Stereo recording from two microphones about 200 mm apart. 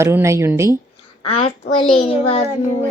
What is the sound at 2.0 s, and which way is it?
Speech, 30° left (ahead or behind).